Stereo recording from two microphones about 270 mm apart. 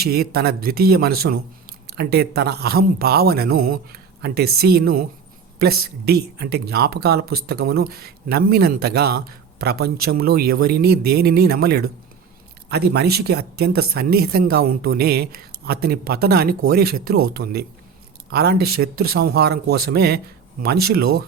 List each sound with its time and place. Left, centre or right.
0.0 s speech: right